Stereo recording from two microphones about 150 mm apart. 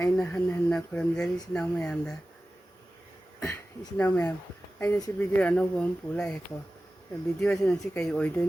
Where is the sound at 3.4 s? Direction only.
15° left (ahead or behind).